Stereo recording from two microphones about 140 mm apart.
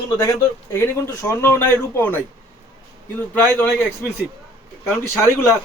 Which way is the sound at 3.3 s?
10° left (ahead or behind).